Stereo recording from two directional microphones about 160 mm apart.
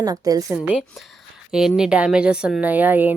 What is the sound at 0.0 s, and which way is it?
Speech, 20° right (ahead or behind).